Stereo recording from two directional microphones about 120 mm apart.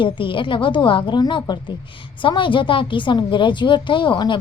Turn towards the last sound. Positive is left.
turn(degrees=40)  # may be behind; listen again after turning